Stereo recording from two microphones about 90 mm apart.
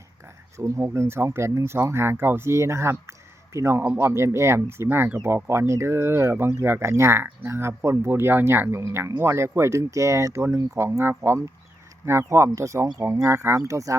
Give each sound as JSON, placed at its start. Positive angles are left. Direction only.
{"t": 0.6, "sound": "speech", "side_deg": -30}